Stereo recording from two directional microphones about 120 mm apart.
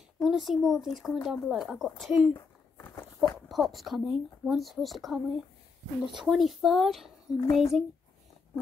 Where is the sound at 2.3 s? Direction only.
15° left (ahead or behind).